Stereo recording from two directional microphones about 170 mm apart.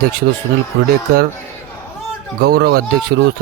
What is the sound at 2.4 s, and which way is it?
Speech, 65° right (ahead or behind).